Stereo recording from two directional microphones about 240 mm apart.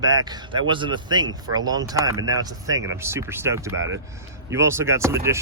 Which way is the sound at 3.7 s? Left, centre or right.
Right.